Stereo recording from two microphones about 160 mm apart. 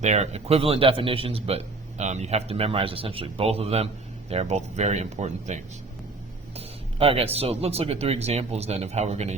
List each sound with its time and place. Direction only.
0.0 s speech: 45° right (ahead or behind)